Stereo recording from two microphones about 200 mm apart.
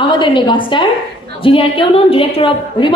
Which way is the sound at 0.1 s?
25° left (ahead or behind).